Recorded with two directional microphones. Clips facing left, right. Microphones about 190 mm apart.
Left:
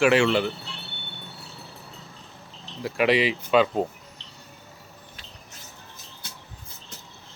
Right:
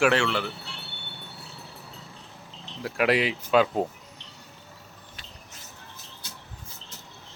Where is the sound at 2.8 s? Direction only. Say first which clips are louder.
Left 2 dB; centre (ahead or behind).